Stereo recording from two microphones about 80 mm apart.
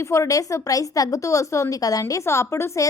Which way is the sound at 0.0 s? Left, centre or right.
Left.